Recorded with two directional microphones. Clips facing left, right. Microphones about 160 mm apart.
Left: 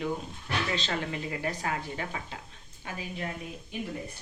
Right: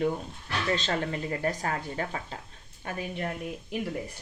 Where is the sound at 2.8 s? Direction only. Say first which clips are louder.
Right 3 dB; 55° right (ahead or behind).